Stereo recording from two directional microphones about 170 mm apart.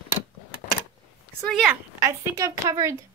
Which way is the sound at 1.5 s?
5° right (ahead or behind).